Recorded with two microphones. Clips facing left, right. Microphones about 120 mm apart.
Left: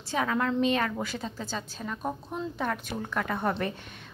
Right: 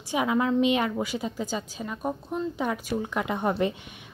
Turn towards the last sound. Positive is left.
turn(degrees=-15)  # may be behind; listen again after turning